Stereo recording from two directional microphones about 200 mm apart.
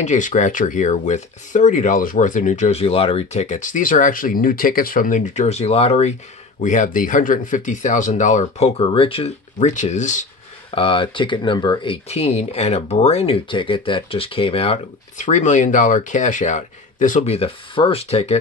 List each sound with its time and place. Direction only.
0.0 s speech: 35° left (ahead or behind)
10.7 s speech: 25° left (ahead or behind)